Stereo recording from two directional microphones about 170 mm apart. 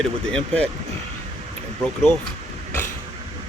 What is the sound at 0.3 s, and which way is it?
Speech, 5° left (ahead or behind).